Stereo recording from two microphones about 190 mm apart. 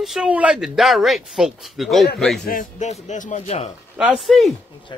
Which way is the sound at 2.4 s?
45° left (ahead or behind).